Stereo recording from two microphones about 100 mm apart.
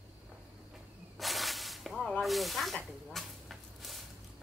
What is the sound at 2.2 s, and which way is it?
Snake, centre (ahead or behind).